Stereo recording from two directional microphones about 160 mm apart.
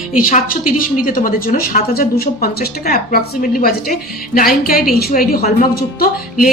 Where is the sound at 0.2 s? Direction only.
60° left (ahead or behind).